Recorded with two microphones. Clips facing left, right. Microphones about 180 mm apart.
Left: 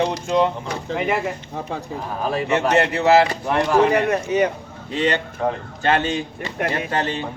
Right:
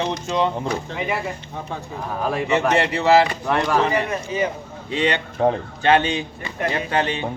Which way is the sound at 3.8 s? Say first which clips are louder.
Left 4 dB; 60° left (ahead or behind).